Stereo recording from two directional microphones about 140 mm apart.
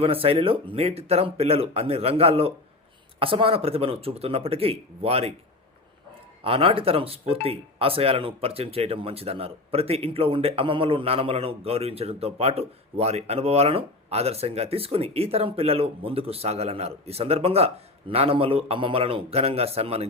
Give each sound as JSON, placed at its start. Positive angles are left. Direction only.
{"t": 0.0, "sound": "speech", "side_deg": -45}
{"t": 6.4, "sound": "speech", "side_deg": -40}